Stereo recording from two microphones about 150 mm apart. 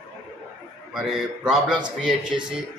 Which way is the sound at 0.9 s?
5° right (ahead or behind).